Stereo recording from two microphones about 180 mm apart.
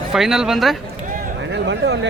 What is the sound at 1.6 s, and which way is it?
Speech, 80° right.